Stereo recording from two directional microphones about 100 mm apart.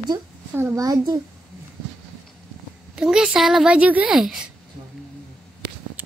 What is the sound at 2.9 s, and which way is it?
A woman's voice, 5° right (ahead or behind).